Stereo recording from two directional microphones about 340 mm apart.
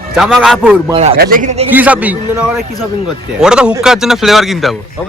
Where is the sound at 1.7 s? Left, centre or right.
Centre.